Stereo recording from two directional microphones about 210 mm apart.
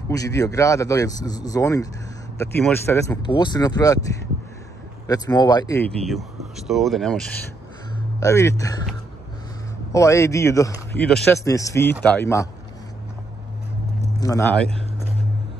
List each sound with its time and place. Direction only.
0.1 s speech: 15° left (ahead or behind)
5.9 s speech: centre (ahead or behind)
8.2 s speech: 15° left (ahead or behind)
9.9 s speech: 15° left (ahead or behind)
11.1 s speech: centre (ahead or behind)
11.3 s speech: 15° left (ahead or behind)
14.2 s speech: 15° left (ahead or behind)